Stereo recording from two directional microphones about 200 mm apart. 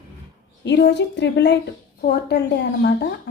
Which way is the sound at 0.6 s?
60° left (ahead or behind).